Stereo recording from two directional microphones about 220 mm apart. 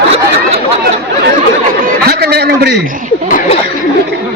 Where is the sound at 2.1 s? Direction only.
45° right (ahead or behind).